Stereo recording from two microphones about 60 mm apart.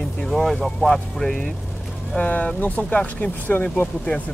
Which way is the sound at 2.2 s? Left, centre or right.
Left.